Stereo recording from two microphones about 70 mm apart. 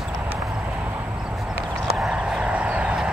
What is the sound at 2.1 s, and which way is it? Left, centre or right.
Vehicle, centre.